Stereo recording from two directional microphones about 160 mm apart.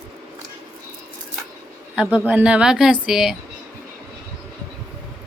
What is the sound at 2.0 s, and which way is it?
Speech, 5° right (ahead or behind).